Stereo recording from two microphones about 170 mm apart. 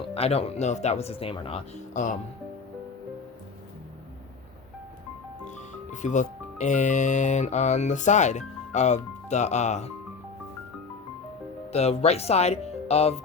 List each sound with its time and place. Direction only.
0.1 s speech: 35° left (ahead or behind)
5.9 s speech: 45° left (ahead or behind)
11.7 s speech: 40° left (ahead or behind)